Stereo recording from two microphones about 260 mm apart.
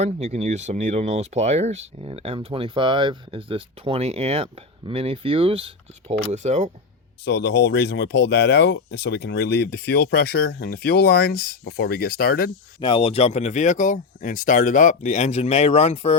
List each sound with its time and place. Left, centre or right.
0.0 s speech: right
7.3 s speech: left
12.8 s speech: left